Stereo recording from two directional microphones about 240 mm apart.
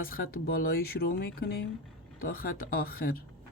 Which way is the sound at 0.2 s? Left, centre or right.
Left.